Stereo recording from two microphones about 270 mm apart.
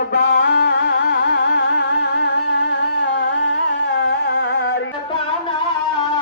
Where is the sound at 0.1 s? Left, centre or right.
Left.